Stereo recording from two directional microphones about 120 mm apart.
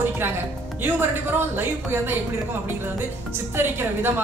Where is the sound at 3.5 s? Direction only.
20° right (ahead or behind).